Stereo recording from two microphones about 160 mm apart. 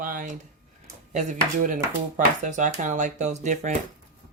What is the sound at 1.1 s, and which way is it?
Speech, 50° right (ahead or behind).